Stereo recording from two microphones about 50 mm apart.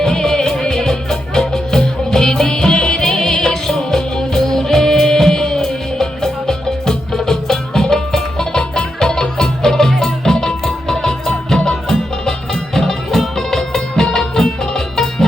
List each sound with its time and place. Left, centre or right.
0.0 s music: centre